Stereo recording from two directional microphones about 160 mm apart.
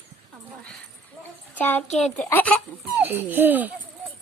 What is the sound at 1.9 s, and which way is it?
Speech, 45° left (ahead or behind).